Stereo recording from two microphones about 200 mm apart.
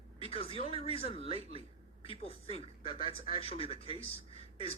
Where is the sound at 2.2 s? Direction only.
30° left (ahead or behind).